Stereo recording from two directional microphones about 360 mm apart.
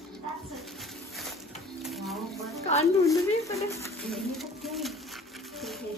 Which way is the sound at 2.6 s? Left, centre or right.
Centre.